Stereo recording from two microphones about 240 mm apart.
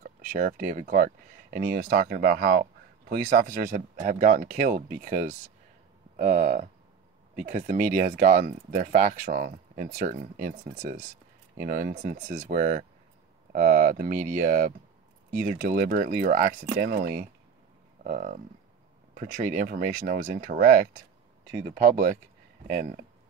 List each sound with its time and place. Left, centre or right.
0.0 s speech: right